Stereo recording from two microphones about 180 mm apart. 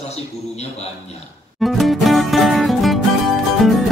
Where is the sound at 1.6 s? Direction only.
Centre (ahead or behind).